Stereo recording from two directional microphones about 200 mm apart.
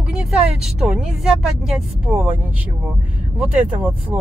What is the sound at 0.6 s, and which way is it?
Speech, 5° right (ahead or behind).